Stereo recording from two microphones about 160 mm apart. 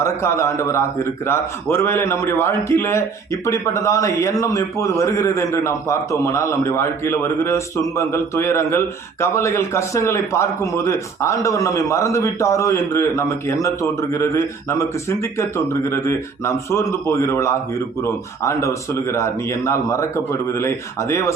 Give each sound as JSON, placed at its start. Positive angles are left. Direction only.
{"t": 0.0, "sound": "a man's voice", "side_deg": 15}